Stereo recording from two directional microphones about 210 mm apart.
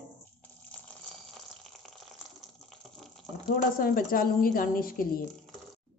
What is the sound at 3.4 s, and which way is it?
A woman's voice, 45° left (ahead or behind).